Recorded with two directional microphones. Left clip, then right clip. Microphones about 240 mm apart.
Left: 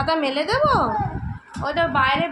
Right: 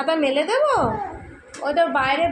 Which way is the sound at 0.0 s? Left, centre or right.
Centre.